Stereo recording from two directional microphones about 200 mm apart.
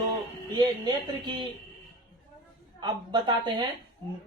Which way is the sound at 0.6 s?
25° right (ahead or behind).